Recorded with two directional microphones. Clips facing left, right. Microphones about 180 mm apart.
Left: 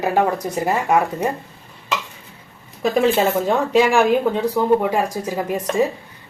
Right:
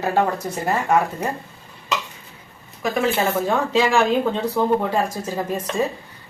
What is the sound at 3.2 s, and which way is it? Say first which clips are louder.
A woman's voice: left 3 dB; 15° left (ahead or behind).